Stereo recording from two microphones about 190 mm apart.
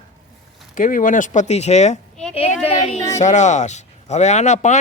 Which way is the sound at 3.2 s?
40° left (ahead or behind).